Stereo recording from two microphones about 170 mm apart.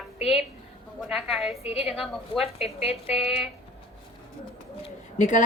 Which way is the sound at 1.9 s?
Centre (ahead or behind).